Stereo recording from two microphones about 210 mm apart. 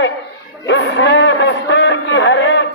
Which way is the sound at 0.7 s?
60° left (ahead or behind).